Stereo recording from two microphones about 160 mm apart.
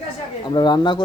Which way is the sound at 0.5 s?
25° left (ahead or behind).